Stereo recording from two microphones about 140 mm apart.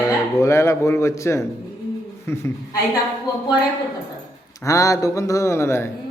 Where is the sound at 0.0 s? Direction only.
20° left (ahead or behind).